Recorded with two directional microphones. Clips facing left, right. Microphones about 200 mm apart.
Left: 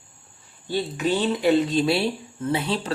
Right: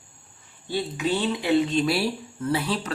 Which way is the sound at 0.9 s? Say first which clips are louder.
Left 2 dB; 45° left (ahead or behind).